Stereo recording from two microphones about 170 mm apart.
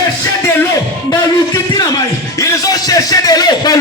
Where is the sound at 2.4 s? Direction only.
20° left (ahead or behind).